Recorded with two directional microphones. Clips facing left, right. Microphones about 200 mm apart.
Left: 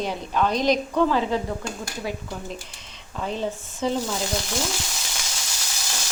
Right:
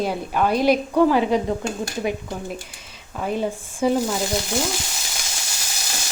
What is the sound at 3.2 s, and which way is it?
Speech, 10° right (ahead or behind).